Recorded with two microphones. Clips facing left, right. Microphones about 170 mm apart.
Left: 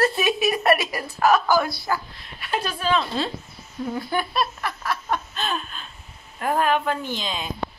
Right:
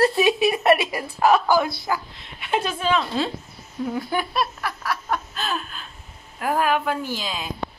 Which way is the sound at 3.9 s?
10° right (ahead or behind).